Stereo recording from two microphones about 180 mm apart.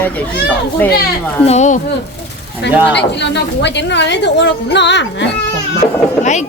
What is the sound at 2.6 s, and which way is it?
Speech, 75° left (ahead or behind).